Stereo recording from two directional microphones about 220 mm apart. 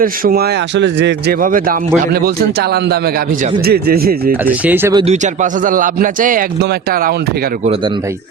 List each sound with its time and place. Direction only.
0.0 s a man's voice: 45° right (ahead or behind)
4.4 s speech: 10° right (ahead or behind)
4.9 s a man's voice: 30° right (ahead or behind)